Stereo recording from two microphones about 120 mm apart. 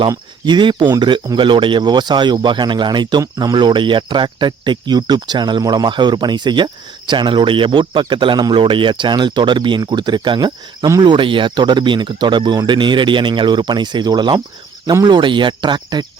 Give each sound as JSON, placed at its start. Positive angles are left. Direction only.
{"t": 0.4, "sound": "speech", "side_deg": -40}